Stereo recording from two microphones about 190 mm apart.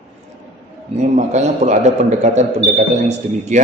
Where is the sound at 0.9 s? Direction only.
40° right (ahead or behind).